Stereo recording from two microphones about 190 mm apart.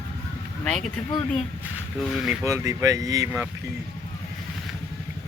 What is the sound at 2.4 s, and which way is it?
Speech, 15° right (ahead or behind).